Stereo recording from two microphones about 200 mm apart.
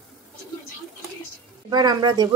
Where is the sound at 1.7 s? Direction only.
20° right (ahead or behind).